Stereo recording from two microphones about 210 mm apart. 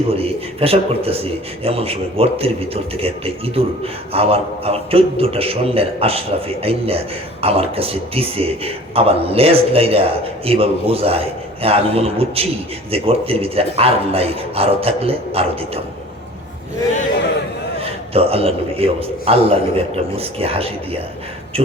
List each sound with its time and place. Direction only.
0.1 s a man's voice: 25° right (ahead or behind)
17.7 s a man's voice: 25° right (ahead or behind)